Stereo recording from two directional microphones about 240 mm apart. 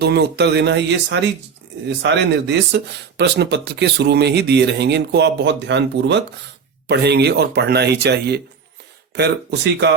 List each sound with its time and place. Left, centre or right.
0.0 s speech: right